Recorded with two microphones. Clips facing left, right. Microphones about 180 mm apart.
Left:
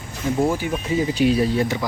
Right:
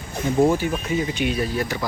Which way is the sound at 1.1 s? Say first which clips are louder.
Left 5 dB; 30° left (ahead or behind).